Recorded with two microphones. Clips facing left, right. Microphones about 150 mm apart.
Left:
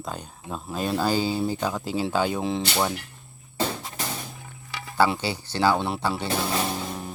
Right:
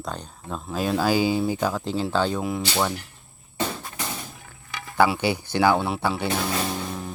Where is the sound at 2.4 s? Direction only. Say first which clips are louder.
Left 1 dB; 25° left (ahead or behind).